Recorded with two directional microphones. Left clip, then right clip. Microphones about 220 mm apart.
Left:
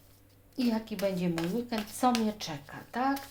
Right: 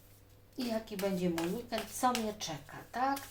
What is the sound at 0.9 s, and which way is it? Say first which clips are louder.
A woman's voice: left 3 dB; 45° left (ahead or behind).